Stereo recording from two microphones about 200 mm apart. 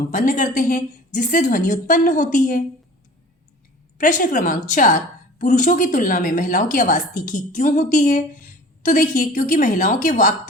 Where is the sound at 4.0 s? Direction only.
40° left (ahead or behind).